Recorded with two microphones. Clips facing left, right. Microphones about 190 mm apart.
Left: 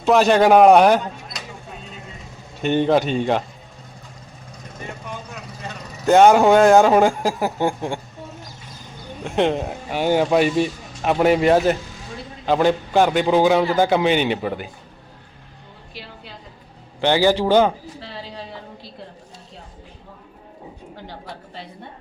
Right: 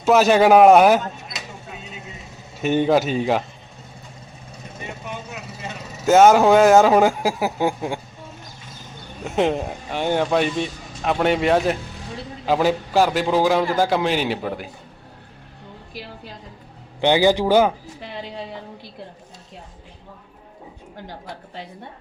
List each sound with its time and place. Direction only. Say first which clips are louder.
0.0 s a sound: even; 5° right (ahead or behind)
2.6 s speech: even; 5° right (ahead or behind)
4.8 s vehicle: even; 15° right (ahead or behind)
5.7 s speech: even; centre (ahead or behind)
9.2 s speech: left 1 dB; centre (ahead or behind)
17.0 s a man's voice: even; 15° right (ahead or behind)